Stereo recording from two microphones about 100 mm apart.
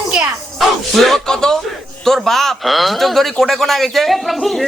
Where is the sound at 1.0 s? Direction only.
Centre (ahead or behind).